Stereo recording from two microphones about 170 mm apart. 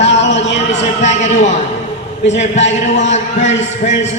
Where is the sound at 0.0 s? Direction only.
90° left.